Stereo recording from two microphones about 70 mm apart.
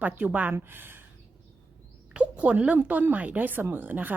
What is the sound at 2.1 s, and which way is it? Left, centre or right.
A woman's voice, centre.